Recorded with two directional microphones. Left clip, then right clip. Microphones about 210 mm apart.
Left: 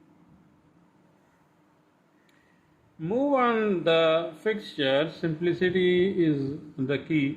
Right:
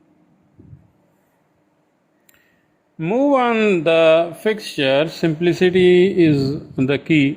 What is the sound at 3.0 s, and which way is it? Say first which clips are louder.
Speech: right 8 dB; 35° right (ahead or behind).